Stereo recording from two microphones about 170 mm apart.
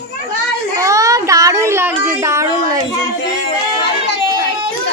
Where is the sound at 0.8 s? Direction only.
20° right (ahead or behind).